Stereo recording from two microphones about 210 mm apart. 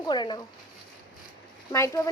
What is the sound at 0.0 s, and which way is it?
Speech, 20° left (ahead or behind).